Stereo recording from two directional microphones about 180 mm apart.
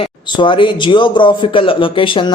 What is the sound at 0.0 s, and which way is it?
Speech, 25° left (ahead or behind).